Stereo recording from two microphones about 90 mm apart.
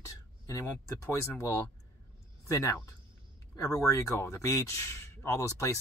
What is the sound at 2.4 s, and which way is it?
Speech, 35° left (ahead or behind).